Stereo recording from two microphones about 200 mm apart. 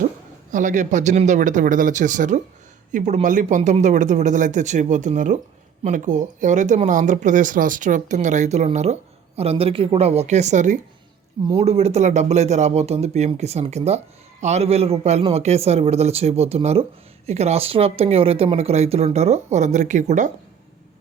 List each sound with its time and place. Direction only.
0.5 s speech: 40° right (ahead or behind)